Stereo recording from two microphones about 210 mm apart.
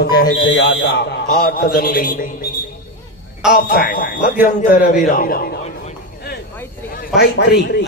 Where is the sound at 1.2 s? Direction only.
45° left (ahead or behind).